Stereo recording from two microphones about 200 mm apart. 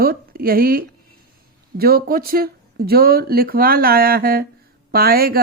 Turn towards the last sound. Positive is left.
turn(degrees=-50)  # may be behind; listen again after turning